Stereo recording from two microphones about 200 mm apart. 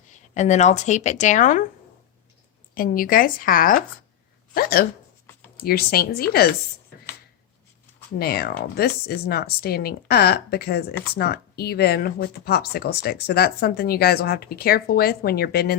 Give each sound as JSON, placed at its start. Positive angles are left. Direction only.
{"t": 0.3, "sound": "speech", "side_deg": 35}
{"t": 2.7, "sound": "speech", "side_deg": 45}
{"t": 8.2, "sound": "speech", "side_deg": 50}